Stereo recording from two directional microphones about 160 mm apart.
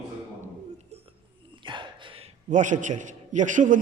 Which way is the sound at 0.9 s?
40° right (ahead or behind).